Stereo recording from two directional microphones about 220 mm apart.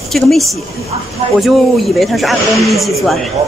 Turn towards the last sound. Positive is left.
turn(degrees=0)  # may be behind; listen again after turning